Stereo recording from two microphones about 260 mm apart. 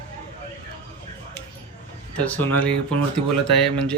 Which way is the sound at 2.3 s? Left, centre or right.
Centre.